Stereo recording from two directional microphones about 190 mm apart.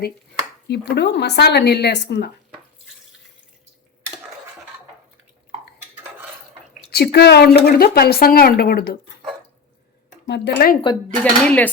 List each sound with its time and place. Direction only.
0.7 s a woman's voice: 60° left (ahead or behind)
6.9 s a woman's voice: 55° left (ahead or behind)
10.2 s a woman's voice: 65° left (ahead or behind)
11.2 s speech: 5° left (ahead or behind)